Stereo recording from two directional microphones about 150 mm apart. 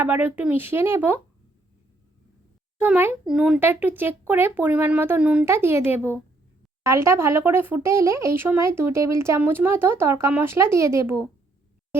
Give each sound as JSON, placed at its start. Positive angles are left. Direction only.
{"t": 0.0, "sound": "speech", "side_deg": -15}
{"t": 2.8, "sound": "speech", "side_deg": -10}